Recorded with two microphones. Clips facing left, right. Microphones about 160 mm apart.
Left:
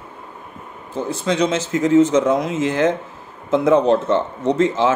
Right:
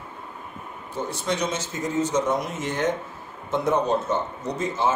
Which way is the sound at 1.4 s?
90° left.